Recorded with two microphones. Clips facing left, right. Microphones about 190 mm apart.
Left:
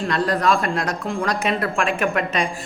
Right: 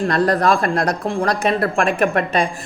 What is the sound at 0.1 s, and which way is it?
A woman's voice, 40° right (ahead or behind).